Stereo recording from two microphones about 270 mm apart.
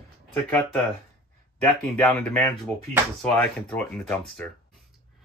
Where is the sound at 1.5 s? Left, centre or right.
Centre.